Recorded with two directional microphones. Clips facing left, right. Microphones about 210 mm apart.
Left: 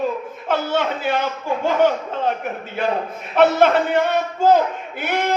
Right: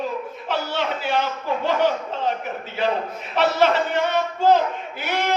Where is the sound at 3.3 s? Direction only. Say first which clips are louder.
Left 4 dB; 50° left (ahead or behind).